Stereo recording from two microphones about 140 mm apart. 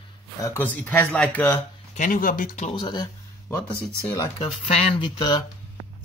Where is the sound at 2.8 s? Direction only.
35° left (ahead or behind).